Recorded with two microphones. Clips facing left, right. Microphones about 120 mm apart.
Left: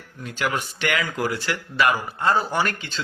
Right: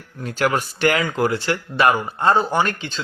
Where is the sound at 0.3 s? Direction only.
45° right (ahead or behind).